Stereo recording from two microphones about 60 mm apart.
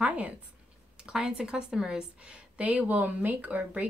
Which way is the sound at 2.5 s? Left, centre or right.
Right.